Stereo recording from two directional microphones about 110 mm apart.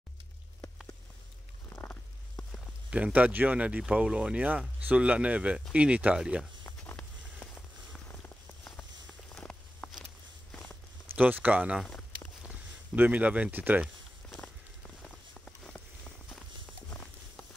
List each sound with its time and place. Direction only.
1.7 s stomach rumble: 20° left (ahead or behind)
2.9 s speech: 15° right (ahead or behind)
9.3 s a sound: 10° left (ahead or behind)
11.1 s speech: 15° right (ahead or behind)
15.0 s rain on surface: 10° left (ahead or behind)